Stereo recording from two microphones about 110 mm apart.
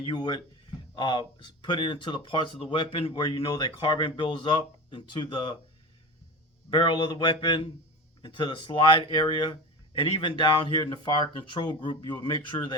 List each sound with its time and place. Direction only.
0.0 s speech: 45° left (ahead or behind)
6.7 s speech: 45° left (ahead or behind)